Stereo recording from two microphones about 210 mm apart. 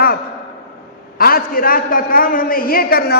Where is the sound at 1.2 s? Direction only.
45° left (ahead or behind).